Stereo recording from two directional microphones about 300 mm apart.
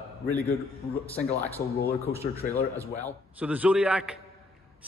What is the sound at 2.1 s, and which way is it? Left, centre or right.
Speech, left.